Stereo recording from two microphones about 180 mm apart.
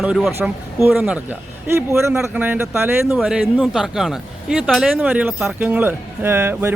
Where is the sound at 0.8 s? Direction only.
10° right (ahead or behind).